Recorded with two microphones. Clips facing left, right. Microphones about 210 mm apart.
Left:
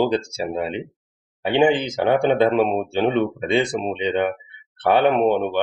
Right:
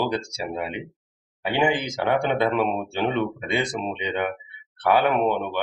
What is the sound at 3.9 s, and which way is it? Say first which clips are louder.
Speech: left 6 dB; 25° left (ahead or behind).